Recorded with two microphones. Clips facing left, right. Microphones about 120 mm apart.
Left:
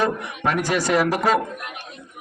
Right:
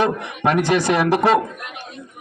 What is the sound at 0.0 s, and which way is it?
A man's voice, 20° right (ahead or behind).